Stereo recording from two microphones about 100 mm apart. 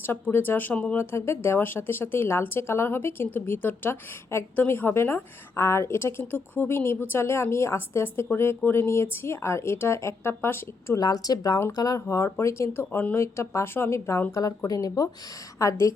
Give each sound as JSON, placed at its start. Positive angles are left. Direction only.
{"t": 0.0, "sound": "a woman's voice", "side_deg": 20}
{"t": 0.9, "sound": "a woman's voice", "side_deg": 25}
{"t": 11.0, "sound": "a woman's voice", "side_deg": 40}